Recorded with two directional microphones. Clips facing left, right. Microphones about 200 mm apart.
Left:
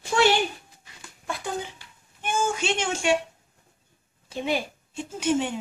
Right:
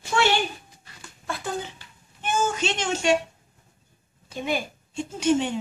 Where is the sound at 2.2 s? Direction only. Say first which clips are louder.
Right 1 dB; 10° left (ahead or behind).